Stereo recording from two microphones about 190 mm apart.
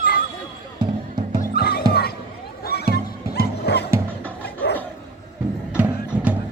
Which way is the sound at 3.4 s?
60° left (ahead or behind).